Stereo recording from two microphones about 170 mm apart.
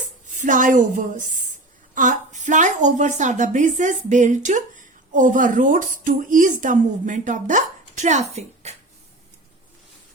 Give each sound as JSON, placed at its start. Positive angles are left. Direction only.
{"t": 0.3, "sound": "a woman's voice", "side_deg": -50}